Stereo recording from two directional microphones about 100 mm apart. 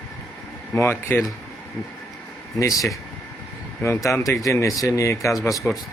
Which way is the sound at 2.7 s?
Centre (ahead or behind).